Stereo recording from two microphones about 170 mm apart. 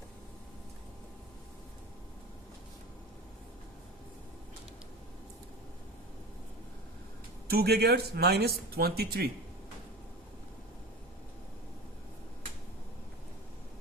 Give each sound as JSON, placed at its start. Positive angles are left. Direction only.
{"t": 7.4, "sound": "speech", "side_deg": -65}